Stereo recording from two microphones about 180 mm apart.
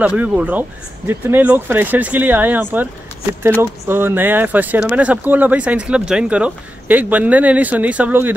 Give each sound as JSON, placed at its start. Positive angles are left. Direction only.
{"t": 0.0, "sound": "speech", "side_deg": -5}
{"t": 3.8, "sound": "speech", "side_deg": -10}